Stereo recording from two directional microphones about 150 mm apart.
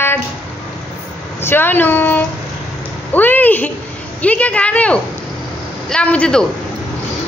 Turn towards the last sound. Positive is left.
turn(degrees=5)  # may be behind; listen again after turning